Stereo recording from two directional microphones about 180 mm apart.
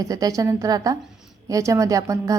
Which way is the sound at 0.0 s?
20° right (ahead or behind).